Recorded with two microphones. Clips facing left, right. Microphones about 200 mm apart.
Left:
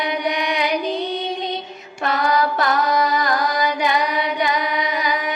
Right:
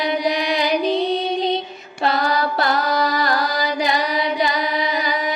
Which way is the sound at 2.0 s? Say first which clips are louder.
Even; 35° right (ahead or behind).